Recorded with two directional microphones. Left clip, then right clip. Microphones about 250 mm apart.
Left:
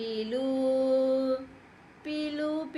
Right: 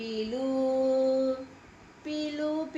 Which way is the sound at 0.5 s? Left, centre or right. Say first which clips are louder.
Even; left.